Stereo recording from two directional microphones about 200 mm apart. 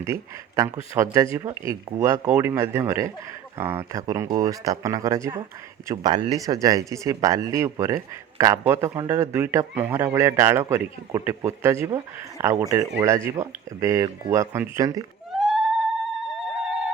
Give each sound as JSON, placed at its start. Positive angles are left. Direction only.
{"t": 0.0, "sound": "speech", "side_deg": -15}
{"t": 15.3, "sound": "music", "side_deg": 0}
{"t": 16.2, "sound": "a sound", "side_deg": 0}